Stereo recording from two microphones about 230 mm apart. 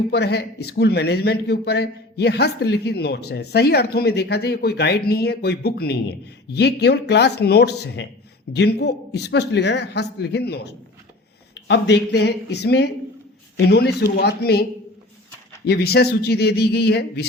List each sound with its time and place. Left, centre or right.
0.1 s a man's voice: left